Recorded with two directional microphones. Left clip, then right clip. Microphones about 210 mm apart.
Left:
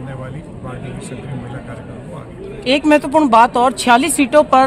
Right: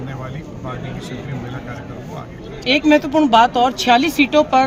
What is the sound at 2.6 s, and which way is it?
Speech, 50° left (ahead or behind).